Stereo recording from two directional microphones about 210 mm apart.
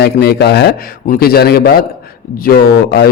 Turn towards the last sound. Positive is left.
turn(degrees=50)  # may be behind; listen again after turning